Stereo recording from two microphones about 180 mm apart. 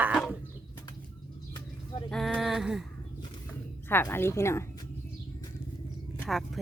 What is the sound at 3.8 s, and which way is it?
A woman's voice, 10° left (ahead or behind).